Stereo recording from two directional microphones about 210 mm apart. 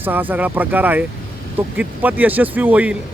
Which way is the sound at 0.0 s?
10° right (ahead or behind).